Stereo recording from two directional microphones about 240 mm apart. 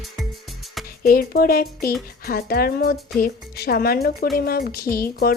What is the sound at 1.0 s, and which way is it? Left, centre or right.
A woman's voice, left.